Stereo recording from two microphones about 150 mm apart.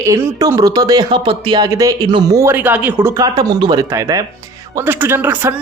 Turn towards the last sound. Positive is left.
turn(degrees=-15)  # may be behind; listen again after turning